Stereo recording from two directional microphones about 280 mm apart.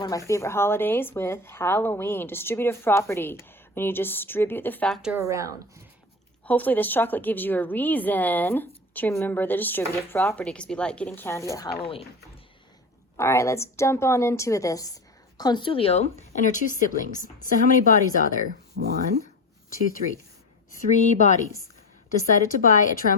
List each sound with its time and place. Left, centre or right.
0.3 s a woman's voice: centre
5.3 s a woman's voice: centre
6.4 s a woman's voice: centre
13.1 s a woman's voice: centre; by 17.9 s left
18.4 s speech: right
20.7 s speech: left